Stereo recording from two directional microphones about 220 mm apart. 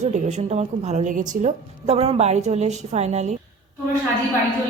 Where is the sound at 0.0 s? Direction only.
30° right (ahead or behind).